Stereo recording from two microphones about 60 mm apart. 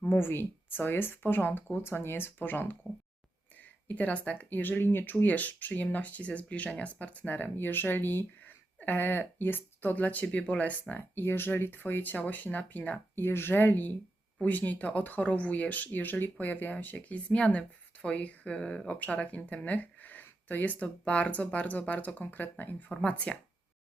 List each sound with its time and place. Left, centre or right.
0.1 s speech: left
5.1 s speech: left
13.1 s speech: left
23.0 s speech: left